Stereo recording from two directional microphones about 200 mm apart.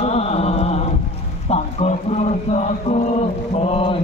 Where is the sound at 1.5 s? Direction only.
35° left (ahead or behind).